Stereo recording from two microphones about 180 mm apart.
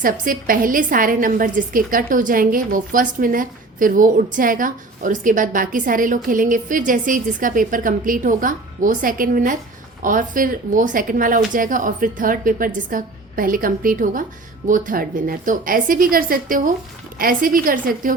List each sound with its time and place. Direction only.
0.0 s a woman's voice: 50° right (ahead or behind)